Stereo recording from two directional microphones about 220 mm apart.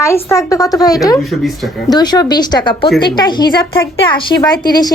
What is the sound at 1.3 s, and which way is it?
Speech, centre (ahead or behind).